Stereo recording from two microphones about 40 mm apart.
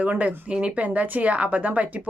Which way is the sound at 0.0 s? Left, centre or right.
Right.